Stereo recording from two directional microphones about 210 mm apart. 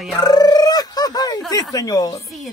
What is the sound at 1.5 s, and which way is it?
Speech, 20° left (ahead or behind).